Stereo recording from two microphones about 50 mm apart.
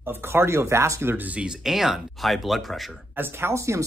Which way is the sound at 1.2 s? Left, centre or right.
Right.